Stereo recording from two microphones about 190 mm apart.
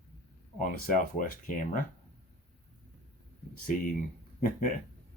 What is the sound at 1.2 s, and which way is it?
Speech, 45° left (ahead or behind).